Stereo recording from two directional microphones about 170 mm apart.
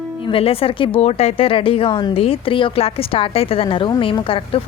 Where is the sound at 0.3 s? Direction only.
35° left (ahead or behind).